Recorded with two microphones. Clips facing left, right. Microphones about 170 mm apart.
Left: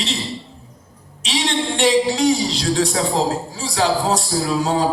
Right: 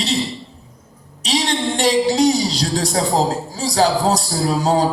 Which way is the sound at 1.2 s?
40° right (ahead or behind).